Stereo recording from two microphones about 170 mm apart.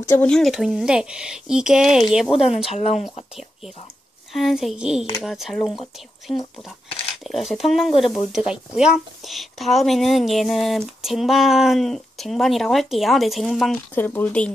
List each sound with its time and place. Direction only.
0.2 s a woman's voice: 5° left (ahead or behind)
2.3 s speech: 35° left (ahead or behind)
4.3 s a woman's voice: centre (ahead or behind)
6.3 s speech: 35° left (ahead or behind)
7.2 s a woman's voice: centre (ahead or behind)
13.9 s speech: 10° left (ahead or behind)